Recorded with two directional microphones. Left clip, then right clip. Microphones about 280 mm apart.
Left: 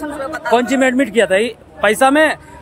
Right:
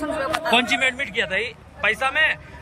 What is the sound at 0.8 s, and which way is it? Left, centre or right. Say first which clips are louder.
Speech: left 8 dB; left.